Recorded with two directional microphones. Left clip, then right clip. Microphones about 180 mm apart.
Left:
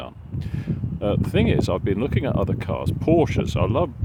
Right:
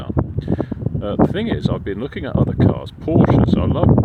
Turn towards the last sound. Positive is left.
turn(degrees=15)  # may be behind; listen again after turning